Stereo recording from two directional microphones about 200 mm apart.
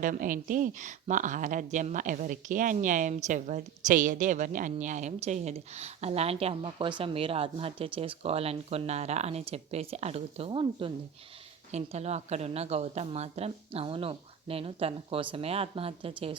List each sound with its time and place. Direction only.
0.0 s speech: 40° right (ahead or behind)